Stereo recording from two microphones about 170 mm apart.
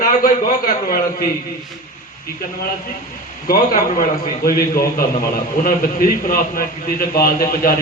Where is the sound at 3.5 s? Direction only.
55° left (ahead or behind).